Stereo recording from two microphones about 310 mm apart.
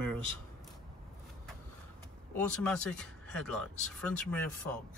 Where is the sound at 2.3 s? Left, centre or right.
Centre.